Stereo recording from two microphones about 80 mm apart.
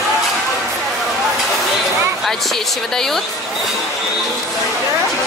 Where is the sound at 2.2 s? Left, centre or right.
Centre.